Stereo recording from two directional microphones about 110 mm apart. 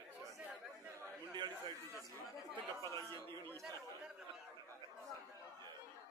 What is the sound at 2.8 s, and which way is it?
Chatter, 25° left (ahead or behind).